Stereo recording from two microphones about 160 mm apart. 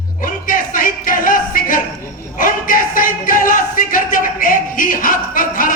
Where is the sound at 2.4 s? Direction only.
60° left (ahead or behind).